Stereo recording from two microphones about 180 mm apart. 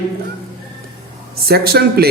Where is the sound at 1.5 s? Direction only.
60° right (ahead or behind).